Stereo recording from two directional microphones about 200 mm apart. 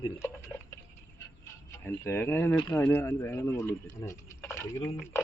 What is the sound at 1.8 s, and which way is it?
Speech, 10° left (ahead or behind).